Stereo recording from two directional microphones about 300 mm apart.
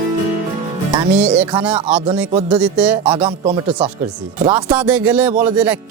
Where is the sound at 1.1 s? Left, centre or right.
Centre.